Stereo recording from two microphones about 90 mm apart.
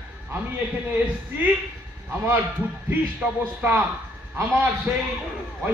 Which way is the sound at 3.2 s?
10° right (ahead or behind).